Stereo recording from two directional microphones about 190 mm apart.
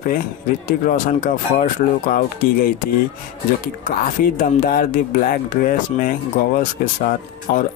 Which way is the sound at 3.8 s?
45° left (ahead or behind).